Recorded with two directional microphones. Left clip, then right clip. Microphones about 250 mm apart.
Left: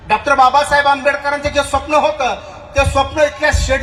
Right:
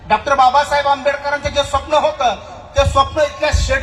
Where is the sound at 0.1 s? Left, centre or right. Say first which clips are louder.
Left 1 dB; left.